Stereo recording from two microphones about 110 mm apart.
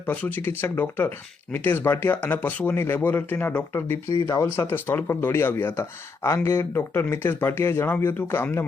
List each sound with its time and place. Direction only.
0.0 s speech: 15° left (ahead or behind)
4.2 s speech: 35° left (ahead or behind)
4.5 s speech: 20° left (ahead or behind)